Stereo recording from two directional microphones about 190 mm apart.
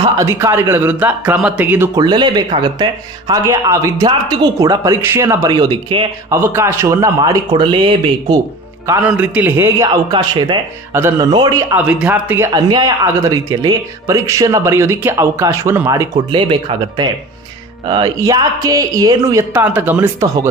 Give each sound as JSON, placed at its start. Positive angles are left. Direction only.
{"t": 0.0, "sound": "speech", "side_deg": -15}
{"t": 2.0, "sound": "speech", "side_deg": -25}
{"t": 6.3, "sound": "speech", "side_deg": -15}
{"t": 8.8, "sound": "speech", "side_deg": -10}
{"t": 10.9, "sound": "speech", "side_deg": -15}
{"t": 11.7, "sound": "speech", "side_deg": -10}
{"t": 12.5, "sound": "speech", "side_deg": -20}